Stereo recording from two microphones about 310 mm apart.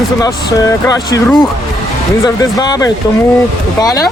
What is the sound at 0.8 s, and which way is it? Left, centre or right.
Speech, centre.